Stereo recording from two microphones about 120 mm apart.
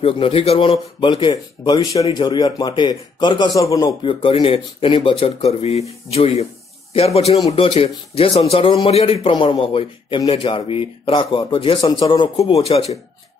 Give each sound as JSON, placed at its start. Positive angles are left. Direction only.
{"t": 0.0, "sound": "a man's voice", "side_deg": 50}
{"t": 3.5, "sound": "a man's voice", "side_deg": 30}
{"t": 4.0, "sound": "a man's voice", "side_deg": 50}
{"t": 7.5, "sound": "a man's voice", "side_deg": 50}
{"t": 12.5, "sound": "speech", "side_deg": 60}